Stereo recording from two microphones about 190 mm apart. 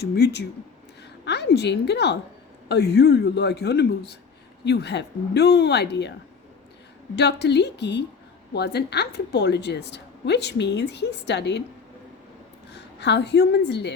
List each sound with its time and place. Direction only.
0.0 s a woman's voice: 60° left (ahead or behind)
7.2 s a woman's voice: 60° left (ahead or behind)
12.7 s a woman's voice: 65° left (ahead or behind)